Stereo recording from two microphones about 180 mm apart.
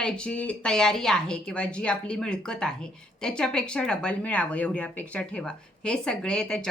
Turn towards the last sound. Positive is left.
turn(degrees=5)  # may be behind; listen again after turning